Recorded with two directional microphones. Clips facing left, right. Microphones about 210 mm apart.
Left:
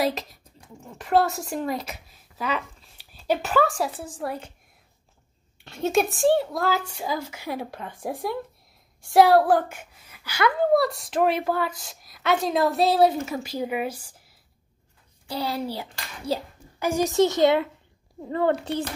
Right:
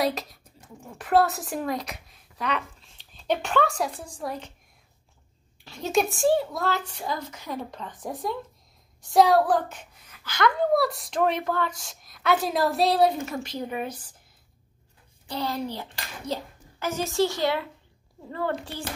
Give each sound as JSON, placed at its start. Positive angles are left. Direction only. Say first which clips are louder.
{"t": 0.0, "sound": "speech", "louder": "left 1 dB", "side_deg": 0}
{"t": 5.6, "sound": "speech", "louder": "left 2 dB", "side_deg": 0}
{"t": 9.7, "sound": "speech", "louder": "left 2 dB", "side_deg": 10}
{"t": 15.2, "sound": "a woman's voice", "louder": "left 1 dB", "side_deg": 10}